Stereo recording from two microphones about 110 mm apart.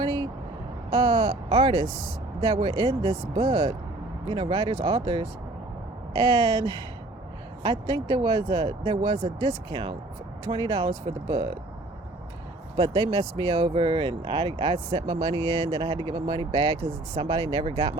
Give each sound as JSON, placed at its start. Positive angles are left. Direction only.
{"t": 0.0, "sound": "vehicle", "side_deg": -45}
{"t": 0.9, "sound": "speech", "side_deg": -45}
{"t": 12.7, "sound": "speech", "side_deg": -45}